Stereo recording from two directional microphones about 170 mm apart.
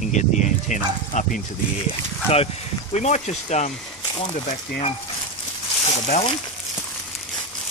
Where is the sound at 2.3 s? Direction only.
40° left (ahead or behind).